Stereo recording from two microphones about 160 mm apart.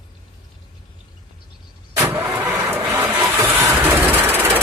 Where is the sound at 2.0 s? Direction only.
15° right (ahead or behind).